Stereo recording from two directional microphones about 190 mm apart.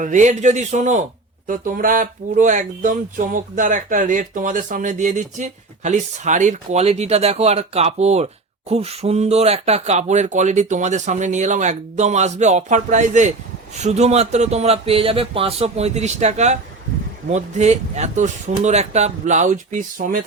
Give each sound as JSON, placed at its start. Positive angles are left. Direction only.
{"t": 0.0, "sound": "speech", "side_deg": -40}